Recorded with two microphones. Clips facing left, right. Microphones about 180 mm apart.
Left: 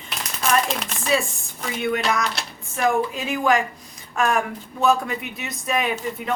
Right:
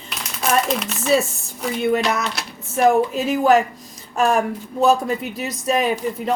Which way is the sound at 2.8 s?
40° right (ahead or behind).